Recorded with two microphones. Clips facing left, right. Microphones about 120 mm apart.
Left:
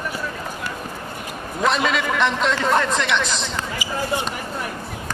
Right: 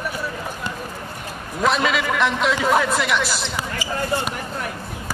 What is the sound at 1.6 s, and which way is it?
A man's voice, centre (ahead or behind).